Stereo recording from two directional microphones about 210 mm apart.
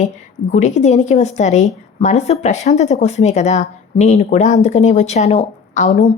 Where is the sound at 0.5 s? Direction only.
35° left (ahead or behind).